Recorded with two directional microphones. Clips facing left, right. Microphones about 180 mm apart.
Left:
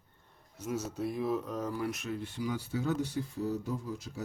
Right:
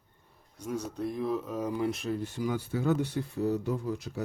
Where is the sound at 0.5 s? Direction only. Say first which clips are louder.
Right 1 dB; 5° left (ahead or behind).